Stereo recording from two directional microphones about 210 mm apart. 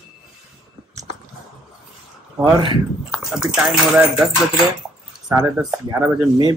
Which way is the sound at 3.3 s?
Centre (ahead or behind).